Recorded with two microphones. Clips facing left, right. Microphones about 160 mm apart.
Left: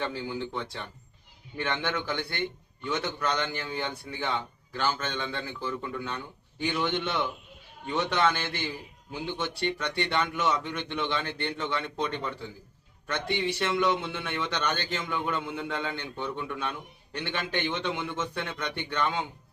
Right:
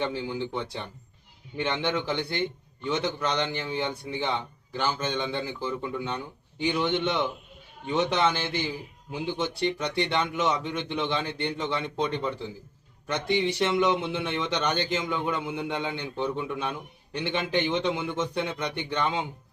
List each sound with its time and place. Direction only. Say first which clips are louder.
0.0 s a man's voice: right 3 dB; 20° right (ahead or behind)